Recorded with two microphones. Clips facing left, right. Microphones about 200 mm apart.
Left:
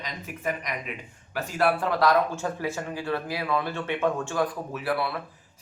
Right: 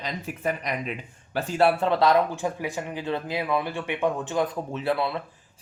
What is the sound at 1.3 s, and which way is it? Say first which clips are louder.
Speech: right 3 dB; 25° right (ahead or behind).